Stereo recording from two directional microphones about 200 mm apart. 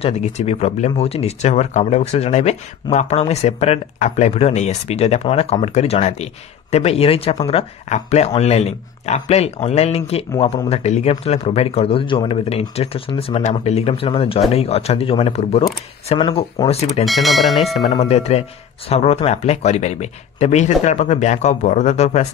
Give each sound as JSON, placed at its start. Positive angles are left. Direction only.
{"t": 0.0, "sound": "speech", "side_deg": 30}
{"t": 17.0, "sound": "speech", "side_deg": 0}
{"t": 17.8, "sound": "speech", "side_deg": 25}